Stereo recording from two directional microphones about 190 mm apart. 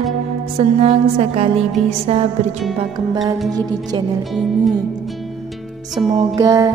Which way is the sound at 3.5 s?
20° right (ahead or behind).